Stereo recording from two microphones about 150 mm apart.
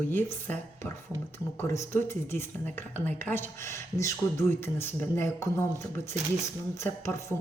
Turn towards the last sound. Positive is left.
turn(degrees=20)  # may be behind; listen again after turning